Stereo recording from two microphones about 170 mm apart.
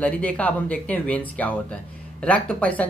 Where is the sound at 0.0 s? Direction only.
10° left (ahead or behind).